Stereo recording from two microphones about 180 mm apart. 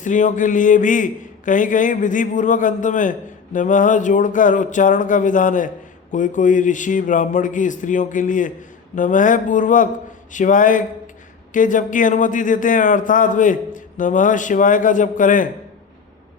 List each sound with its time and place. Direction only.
0.0 s a man's voice: 45° left (ahead or behind)